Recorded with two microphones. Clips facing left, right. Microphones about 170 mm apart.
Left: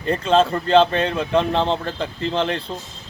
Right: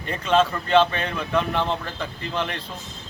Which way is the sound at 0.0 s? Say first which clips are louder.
Left 3 dB; 35° left (ahead or behind).